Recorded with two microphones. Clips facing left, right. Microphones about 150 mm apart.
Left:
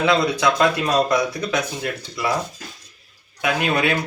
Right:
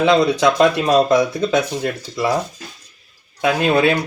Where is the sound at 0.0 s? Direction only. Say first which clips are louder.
Right 4 dB; 25° right (ahead or behind).